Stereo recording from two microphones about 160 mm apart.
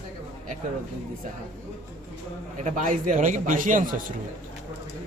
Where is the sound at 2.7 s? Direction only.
55° right (ahead or behind).